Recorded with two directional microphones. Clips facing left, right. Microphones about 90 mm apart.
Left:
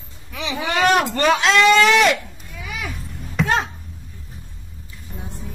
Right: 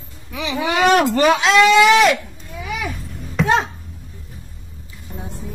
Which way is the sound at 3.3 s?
Centre (ahead or behind).